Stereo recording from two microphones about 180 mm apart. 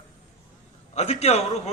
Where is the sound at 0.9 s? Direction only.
35° left (ahead or behind).